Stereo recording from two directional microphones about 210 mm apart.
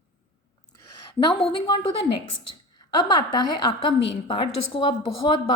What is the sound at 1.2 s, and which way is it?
Speech, 25° left (ahead or behind).